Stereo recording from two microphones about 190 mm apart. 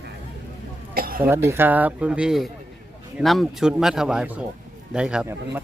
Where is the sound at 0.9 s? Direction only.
50° right (ahead or behind).